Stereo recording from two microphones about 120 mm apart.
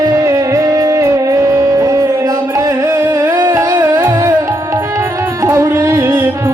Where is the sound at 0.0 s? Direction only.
30° right (ahead or behind).